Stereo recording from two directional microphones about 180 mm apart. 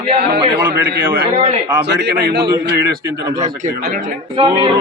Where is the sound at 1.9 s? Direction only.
70° right (ahead or behind).